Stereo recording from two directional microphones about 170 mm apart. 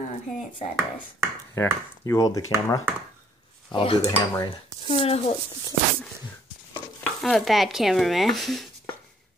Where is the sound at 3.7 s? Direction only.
35° left (ahead or behind).